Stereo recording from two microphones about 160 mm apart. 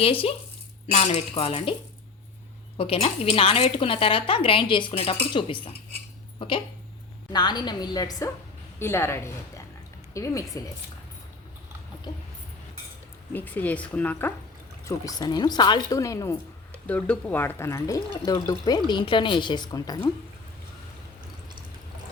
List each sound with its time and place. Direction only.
0.0 s a woman's voice: 35° left (ahead or behind)
2.7 s a woman's voice: 35° left (ahead or behind)
7.3 s speech: 25° left (ahead or behind)
13.3 s speech: 10° left (ahead or behind)
14.8 s speech: 20° left (ahead or behind)